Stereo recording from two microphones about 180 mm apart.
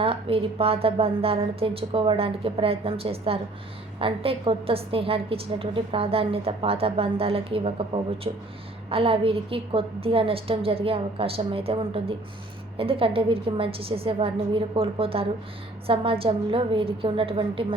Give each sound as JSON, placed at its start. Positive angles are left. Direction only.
{"t": 0.0, "sound": "a woman's voice", "side_deg": -30}